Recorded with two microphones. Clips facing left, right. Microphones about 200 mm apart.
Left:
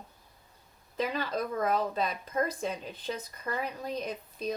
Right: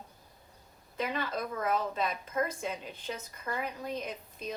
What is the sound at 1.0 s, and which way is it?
A woman's voice, 35° left (ahead or behind).